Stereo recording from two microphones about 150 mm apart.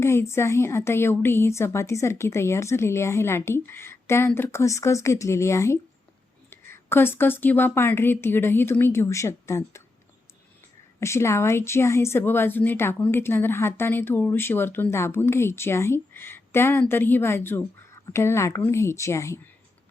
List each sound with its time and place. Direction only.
0.0 s speech: 15° left (ahead or behind)
11.0 s a woman's voice: 20° left (ahead or behind)